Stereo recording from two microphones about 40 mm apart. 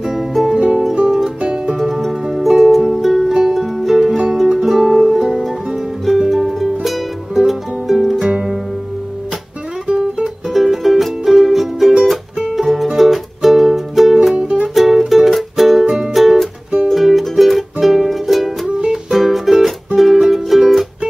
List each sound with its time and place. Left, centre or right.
0.0 s music: centre
0.6 s music: right
1.9 s music: centre
9.8 s music: right
10.5 s music: centre
14.3 s music: right
14.7 s music: centre